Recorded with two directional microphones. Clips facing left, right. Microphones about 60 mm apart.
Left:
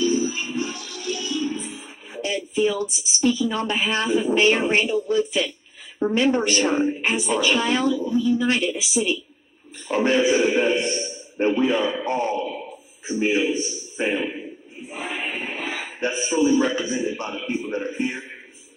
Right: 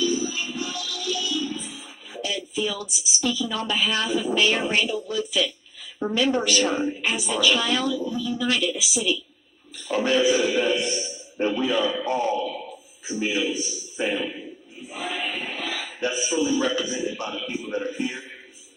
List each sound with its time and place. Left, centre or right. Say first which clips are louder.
0.0 s music: left 3 dB; left
5.9 s a woman's voice: left 3 dB; left